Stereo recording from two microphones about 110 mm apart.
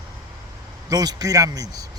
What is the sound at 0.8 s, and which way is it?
Speech, 35° right (ahead or behind).